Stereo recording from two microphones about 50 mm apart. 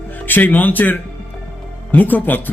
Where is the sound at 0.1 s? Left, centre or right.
Left.